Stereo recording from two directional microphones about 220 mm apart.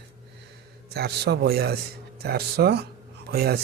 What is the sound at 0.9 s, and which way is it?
Speech, 45° right (ahead or behind).